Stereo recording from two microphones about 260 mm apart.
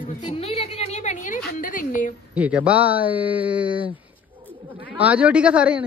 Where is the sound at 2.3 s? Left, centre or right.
Centre.